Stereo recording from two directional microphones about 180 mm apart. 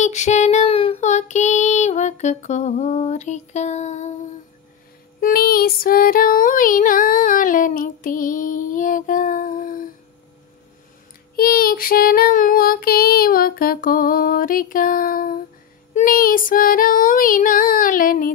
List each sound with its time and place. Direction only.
0.0 s child singing: 40° left (ahead or behind)
5.2 s female singing: 55° left (ahead or behind)
11.3 s child singing: 55° left (ahead or behind)